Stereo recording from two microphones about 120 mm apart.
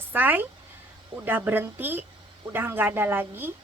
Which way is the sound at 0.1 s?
15° right (ahead or behind).